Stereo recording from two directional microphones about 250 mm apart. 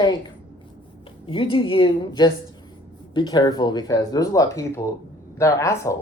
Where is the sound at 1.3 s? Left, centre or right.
Left.